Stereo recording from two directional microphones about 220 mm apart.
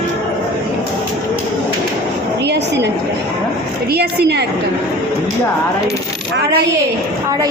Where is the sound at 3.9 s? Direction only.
45° right (ahead or behind).